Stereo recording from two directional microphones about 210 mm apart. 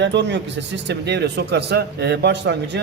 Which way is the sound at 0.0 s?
55° right (ahead or behind).